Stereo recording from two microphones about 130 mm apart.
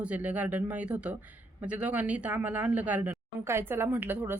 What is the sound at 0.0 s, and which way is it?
Speech, 10° right (ahead or behind).